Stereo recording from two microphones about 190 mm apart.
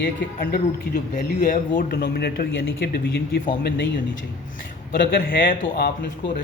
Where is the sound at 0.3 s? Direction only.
50° left (ahead or behind).